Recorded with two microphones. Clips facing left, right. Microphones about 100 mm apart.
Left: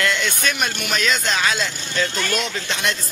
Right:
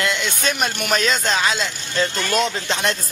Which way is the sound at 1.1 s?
25° right (ahead or behind).